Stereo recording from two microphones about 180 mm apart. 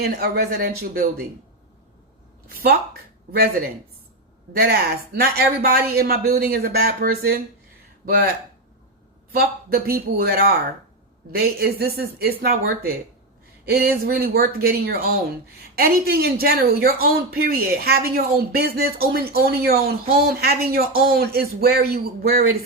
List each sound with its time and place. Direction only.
0.0 s speech: 60° right (ahead or behind)
2.5 s speech: 55° right (ahead or behind)
4.5 s speech: 60° right (ahead or behind)
9.3 s speech: 55° right (ahead or behind)